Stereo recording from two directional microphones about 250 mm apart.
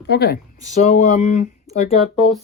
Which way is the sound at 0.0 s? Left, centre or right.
Left.